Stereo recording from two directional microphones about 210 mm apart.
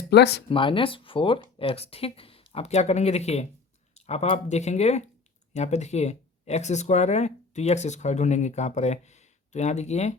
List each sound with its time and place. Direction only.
0.1 s speech: 50° left (ahead or behind)
0.4 s speech: 25° left (ahead or behind)